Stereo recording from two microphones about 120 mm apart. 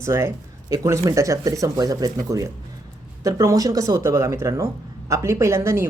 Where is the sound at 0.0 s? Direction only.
25° right (ahead or behind).